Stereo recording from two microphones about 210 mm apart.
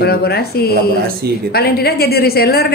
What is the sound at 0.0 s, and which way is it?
Speech, 50° left (ahead or behind).